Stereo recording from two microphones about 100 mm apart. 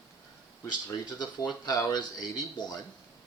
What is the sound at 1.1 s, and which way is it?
Speech, 45° left (ahead or behind).